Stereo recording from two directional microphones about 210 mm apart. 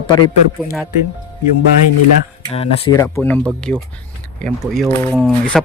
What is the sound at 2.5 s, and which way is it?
Speech, 30° left (ahead or behind).